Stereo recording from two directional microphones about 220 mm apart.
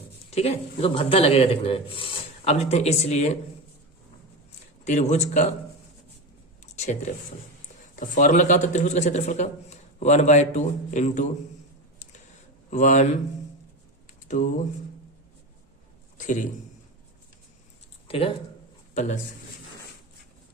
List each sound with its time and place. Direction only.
0.3 s speech: 30° left (ahead or behind)
4.9 s a man's voice: 30° left (ahead or behind)
6.7 s a sound: 30° left (ahead or behind)
7.9 s a man's voice: 35° left (ahead or behind)
12.7 s a man's voice: 35° left (ahead or behind)
16.1 s a man's voice: 35° left (ahead or behind)
18.1 s speech: 25° left (ahead or behind)